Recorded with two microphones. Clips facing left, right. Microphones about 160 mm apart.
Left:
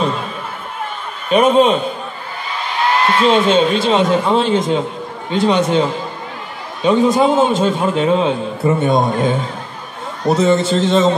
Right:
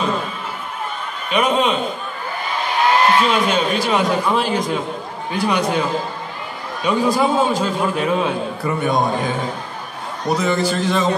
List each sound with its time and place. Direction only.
1.3 s a man's voice: 40° left (ahead or behind)
3.3 s a man's voice: 25° left (ahead or behind)